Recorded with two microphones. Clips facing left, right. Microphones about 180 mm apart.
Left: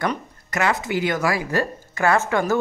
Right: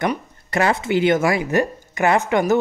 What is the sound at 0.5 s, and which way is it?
A woman's voice, 30° right (ahead or behind).